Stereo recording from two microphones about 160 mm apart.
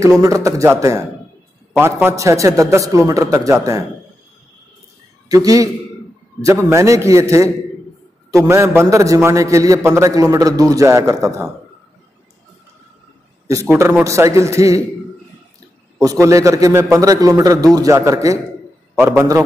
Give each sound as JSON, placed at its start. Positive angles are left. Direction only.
{"t": 0.0, "sound": "a man's voice", "side_deg": -20}
{"t": 5.3, "sound": "a man's voice", "side_deg": -20}
{"t": 13.5, "sound": "a man's voice", "side_deg": -20}
{"t": 16.0, "sound": "a man's voice", "side_deg": -20}